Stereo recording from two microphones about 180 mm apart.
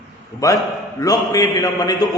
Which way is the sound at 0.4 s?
20° left (ahead or behind).